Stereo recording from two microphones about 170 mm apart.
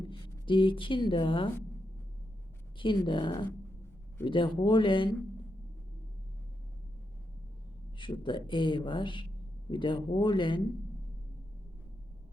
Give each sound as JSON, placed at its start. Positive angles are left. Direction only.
{"t": 0.1, "sound": "a woman's voice", "side_deg": 30}
{"t": 2.7, "sound": "speech", "side_deg": 30}
{"t": 7.9, "sound": "speech", "side_deg": 25}